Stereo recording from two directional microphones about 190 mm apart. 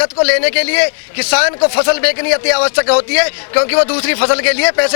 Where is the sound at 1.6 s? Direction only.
25° left (ahead or behind).